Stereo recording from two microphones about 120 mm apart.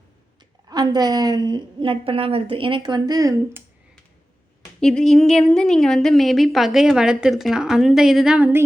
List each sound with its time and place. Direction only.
0.7 s a woman's voice: 35° right (ahead or behind)
4.8 s a woman's voice: 5° left (ahead or behind); by 8.6 s 15° right (ahead or behind)